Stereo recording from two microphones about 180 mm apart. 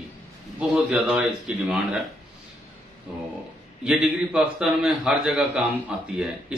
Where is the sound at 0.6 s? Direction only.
10° right (ahead or behind).